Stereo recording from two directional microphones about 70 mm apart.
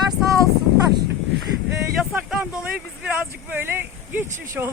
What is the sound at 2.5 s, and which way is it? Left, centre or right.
Speech, centre.